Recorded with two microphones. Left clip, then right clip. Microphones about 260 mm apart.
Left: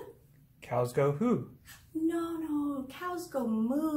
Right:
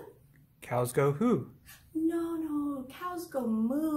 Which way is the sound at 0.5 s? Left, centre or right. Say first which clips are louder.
Even; right.